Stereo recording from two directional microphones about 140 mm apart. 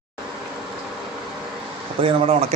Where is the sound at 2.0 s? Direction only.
45° right (ahead or behind).